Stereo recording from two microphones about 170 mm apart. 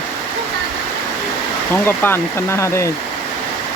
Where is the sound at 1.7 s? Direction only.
10° left (ahead or behind).